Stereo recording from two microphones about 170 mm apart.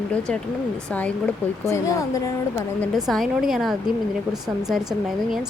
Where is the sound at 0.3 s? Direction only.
5° left (ahead or behind).